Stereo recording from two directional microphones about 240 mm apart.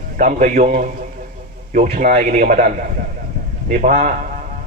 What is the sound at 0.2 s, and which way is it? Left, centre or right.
A man's voice, right.